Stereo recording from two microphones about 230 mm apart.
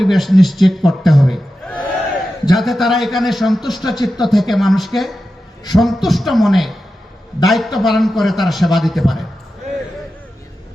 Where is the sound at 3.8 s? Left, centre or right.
Centre.